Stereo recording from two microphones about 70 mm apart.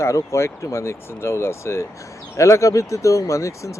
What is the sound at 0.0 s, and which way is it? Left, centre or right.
Speech, left.